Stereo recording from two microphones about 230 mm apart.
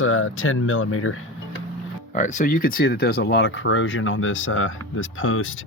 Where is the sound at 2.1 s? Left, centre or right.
Left.